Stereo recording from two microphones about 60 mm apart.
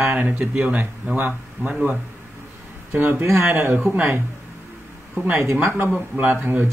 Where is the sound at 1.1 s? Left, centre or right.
Right.